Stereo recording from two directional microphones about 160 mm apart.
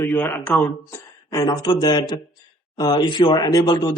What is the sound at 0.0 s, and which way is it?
Speech, 15° left (ahead or behind).